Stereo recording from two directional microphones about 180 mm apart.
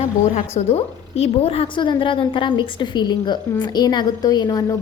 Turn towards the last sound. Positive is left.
turn(degrees=20)  # may be behind; listen again after turning